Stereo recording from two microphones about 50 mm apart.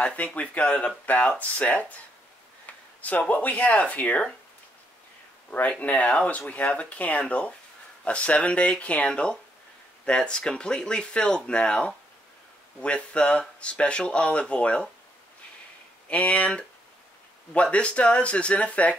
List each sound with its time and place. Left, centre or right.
0.0 s speech: left
5.5 s speech: left
16.1 s speech: left